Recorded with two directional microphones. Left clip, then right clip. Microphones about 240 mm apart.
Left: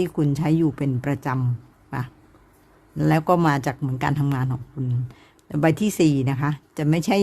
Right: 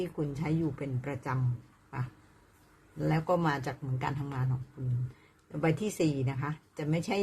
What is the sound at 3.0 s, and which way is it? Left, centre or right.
Speech, left.